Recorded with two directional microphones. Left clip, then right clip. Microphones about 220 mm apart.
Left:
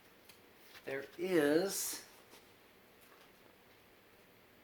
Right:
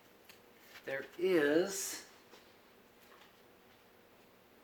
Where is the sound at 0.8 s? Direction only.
25° left (ahead or behind).